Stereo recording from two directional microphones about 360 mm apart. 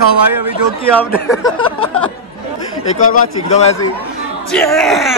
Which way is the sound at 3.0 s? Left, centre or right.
Centre.